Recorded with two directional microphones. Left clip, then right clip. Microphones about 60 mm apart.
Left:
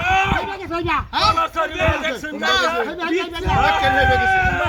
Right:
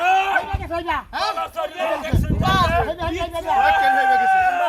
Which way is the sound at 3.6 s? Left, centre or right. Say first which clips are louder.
Even; right.